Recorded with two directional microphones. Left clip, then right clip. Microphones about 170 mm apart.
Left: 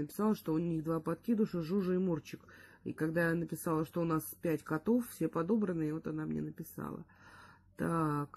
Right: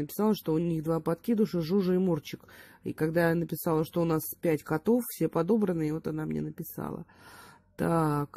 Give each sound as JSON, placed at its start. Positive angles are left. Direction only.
{"t": 0.2, "sound": "a woman's voice", "side_deg": -35}